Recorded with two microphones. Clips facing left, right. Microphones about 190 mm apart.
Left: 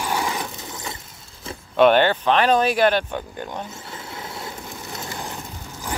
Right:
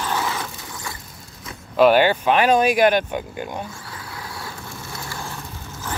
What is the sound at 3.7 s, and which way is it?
Vehicle, 20° left (ahead or behind).